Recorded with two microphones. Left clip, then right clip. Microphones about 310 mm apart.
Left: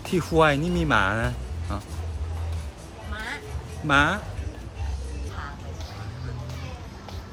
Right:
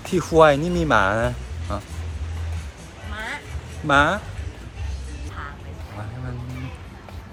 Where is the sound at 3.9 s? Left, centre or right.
Centre.